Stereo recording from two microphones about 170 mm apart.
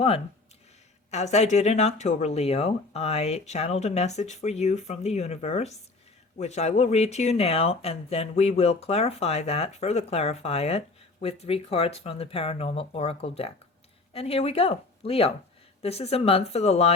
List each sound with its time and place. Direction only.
1.1 s speech: 40° left (ahead or behind)